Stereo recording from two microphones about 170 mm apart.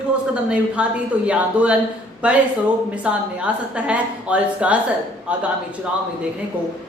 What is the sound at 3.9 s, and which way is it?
Speech, 5° right (ahead or behind).